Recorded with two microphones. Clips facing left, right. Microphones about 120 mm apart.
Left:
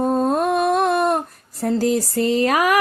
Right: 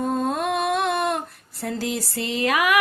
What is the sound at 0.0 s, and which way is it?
Humming, 40° left (ahead or behind).